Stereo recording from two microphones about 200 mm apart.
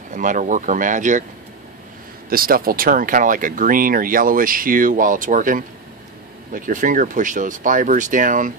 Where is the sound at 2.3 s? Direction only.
45° right (ahead or behind).